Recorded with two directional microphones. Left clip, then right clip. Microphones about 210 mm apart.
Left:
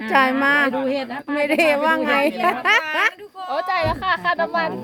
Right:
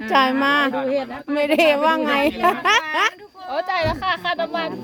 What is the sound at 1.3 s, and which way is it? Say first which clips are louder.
A woman's voice: right 1 dB; 10° right (ahead or behind).